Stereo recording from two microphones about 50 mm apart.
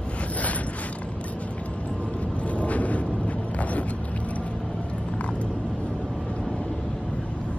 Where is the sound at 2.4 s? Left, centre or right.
Left.